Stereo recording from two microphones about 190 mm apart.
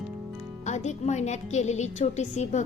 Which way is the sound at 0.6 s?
40° left (ahead or behind).